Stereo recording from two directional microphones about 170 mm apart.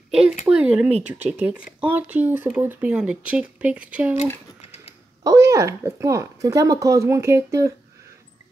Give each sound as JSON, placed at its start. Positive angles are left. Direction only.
{"t": 0.1, "sound": "speech", "side_deg": -5}
{"t": 5.2, "sound": "speech", "side_deg": -20}